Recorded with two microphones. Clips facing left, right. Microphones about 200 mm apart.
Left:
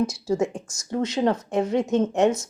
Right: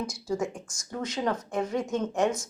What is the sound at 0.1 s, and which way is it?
Speech, 25° left (ahead or behind).